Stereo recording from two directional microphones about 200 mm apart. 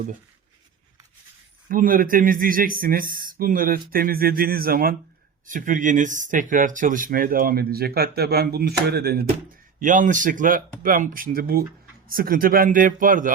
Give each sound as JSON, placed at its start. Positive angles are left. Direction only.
{"t": 1.7, "sound": "speech", "side_deg": -45}
{"t": 9.8, "sound": "speech", "side_deg": -40}